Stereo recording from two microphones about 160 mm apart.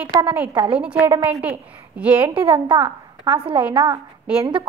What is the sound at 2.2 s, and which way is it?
A woman's voice, 35° right (ahead or behind).